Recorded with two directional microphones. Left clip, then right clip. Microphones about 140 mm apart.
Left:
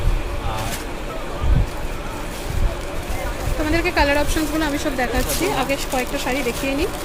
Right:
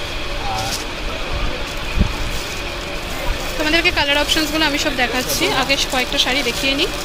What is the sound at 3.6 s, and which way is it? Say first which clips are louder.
Speech: right 3 dB; 10° left (ahead or behind).